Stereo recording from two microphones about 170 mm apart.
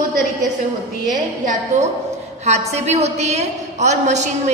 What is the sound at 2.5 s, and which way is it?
A woman's voice, 40° right (ahead or behind).